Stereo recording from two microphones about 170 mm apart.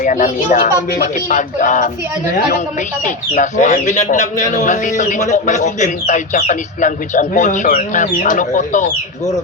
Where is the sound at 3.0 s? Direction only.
50° left (ahead or behind).